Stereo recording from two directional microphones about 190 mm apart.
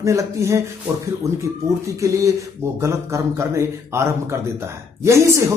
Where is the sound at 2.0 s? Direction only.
15° right (ahead or behind).